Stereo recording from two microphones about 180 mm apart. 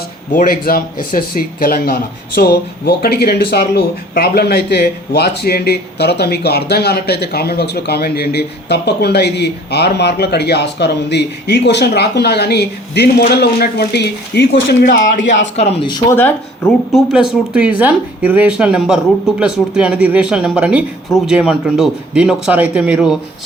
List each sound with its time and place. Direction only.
0.3 s speech: 55° left (ahead or behind); by 15.0 s 70° left (ahead or behind)
15.5 s speech: 35° left (ahead or behind)
15.9 s speech: 15° left (ahead or behind); by 23.1 s 5° right (ahead or behind)